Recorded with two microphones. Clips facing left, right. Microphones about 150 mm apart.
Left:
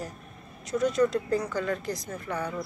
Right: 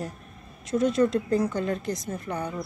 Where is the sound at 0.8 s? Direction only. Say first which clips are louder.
Right 2 dB; 25° right (ahead or behind).